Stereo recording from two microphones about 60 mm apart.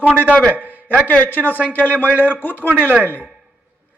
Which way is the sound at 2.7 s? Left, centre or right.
Right.